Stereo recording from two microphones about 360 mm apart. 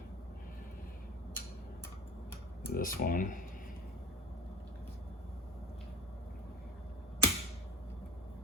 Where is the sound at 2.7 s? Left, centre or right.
Left.